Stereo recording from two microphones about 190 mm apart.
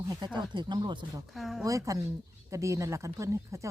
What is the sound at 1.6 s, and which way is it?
Speech, 15° right (ahead or behind).